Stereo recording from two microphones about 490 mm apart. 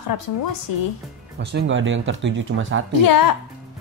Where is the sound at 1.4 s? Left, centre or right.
Right.